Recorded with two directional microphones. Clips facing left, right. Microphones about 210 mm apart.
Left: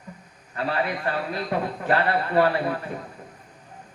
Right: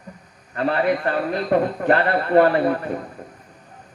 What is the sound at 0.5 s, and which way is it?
A man's voice, 50° right (ahead or behind).